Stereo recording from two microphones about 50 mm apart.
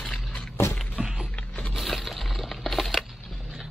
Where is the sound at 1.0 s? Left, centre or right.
Centre.